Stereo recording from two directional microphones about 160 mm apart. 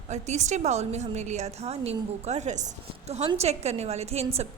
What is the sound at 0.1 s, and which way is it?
A woman's voice, 45° right (ahead or behind).